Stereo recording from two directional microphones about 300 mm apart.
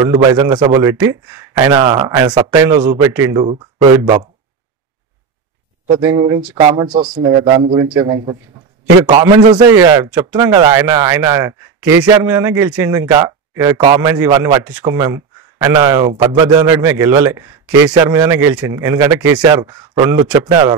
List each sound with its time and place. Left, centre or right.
0.0 s a man's voice: centre
5.9 s a man's voice: centre